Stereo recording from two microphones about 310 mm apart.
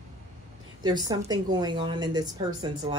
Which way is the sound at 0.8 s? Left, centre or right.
Centre.